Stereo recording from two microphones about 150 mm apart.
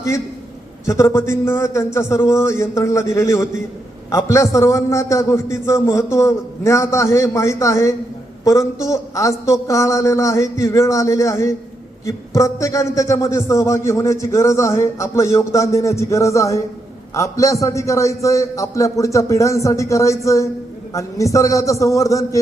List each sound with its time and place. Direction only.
0.9 s a man's voice: 20° left (ahead or behind)